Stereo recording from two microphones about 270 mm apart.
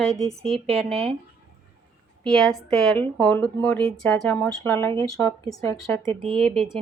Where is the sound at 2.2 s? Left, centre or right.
Centre.